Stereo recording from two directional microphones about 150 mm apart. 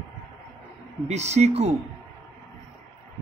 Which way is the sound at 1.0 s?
50° right (ahead or behind).